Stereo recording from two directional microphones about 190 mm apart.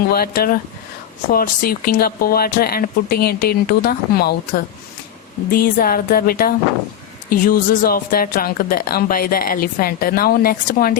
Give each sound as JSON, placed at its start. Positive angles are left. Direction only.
{"t": 0.1, "sound": "a woman's voice", "side_deg": 50}